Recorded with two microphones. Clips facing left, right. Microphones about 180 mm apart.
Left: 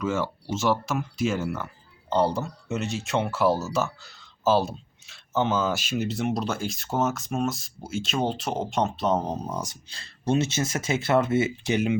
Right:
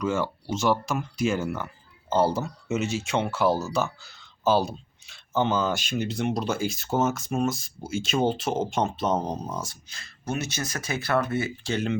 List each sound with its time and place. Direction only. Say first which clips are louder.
0.0 s speech: right 1 dB; centre (ahead or behind)
9.9 s speech: left 7 dB; 30° left (ahead or behind)